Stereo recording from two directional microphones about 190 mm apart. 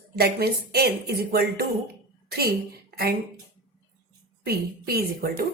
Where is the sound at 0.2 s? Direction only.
55° right (ahead or behind).